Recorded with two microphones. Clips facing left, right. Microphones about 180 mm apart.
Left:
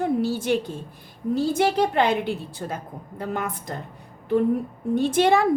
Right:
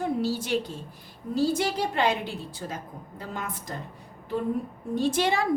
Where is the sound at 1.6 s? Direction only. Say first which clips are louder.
Left 6 dB; 60° left (ahead or behind).